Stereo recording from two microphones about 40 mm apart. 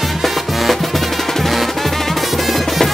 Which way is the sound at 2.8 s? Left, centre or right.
Centre.